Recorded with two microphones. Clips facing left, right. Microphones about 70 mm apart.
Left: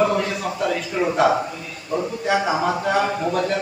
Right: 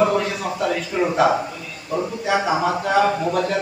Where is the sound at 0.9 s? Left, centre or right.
Centre.